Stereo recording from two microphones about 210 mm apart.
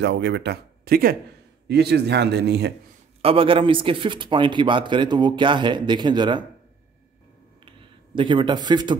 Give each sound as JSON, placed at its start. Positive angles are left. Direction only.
{"t": 0.0, "sound": "speech", "side_deg": -55}
{"t": 3.2, "sound": "a man's voice", "side_deg": -25}
{"t": 7.6, "sound": "a sound", "side_deg": -25}